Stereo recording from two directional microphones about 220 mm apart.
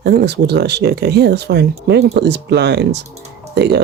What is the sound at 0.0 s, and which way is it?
Speech, 45° right (ahead or behind).